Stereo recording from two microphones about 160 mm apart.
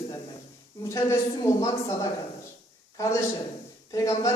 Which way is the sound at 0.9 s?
20° left (ahead or behind).